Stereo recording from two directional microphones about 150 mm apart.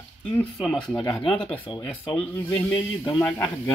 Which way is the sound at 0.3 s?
10° left (ahead or behind).